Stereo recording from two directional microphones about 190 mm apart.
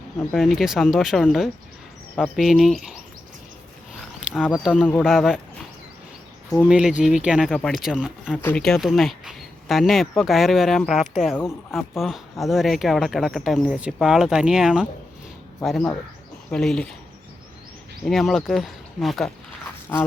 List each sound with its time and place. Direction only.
0.3 s speech: centre (ahead or behind)
4.3 s speech: 5° right (ahead or behind)
4.5 s speech: 5° left (ahead or behind)
6.7 s speech: 5° right (ahead or behind)
8.4 s speech: 10° left (ahead or behind)
18.0 s speech: centre (ahead or behind)